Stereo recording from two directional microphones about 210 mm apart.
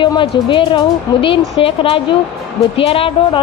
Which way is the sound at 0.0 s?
25° left (ahead or behind).